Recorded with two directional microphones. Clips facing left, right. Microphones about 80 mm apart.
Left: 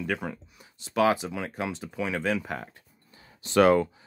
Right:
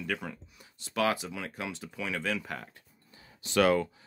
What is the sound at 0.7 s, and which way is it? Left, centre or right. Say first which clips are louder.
Speech: left 6 dB; left.